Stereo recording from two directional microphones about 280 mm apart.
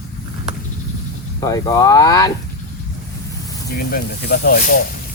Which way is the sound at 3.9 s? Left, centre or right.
Left.